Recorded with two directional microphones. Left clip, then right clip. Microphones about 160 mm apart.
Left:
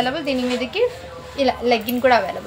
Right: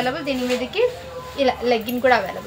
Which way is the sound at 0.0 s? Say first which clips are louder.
Left 2 dB; 25° left (ahead or behind).